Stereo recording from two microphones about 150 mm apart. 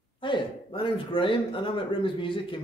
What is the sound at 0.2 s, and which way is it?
A man's voice, 35° left (ahead or behind).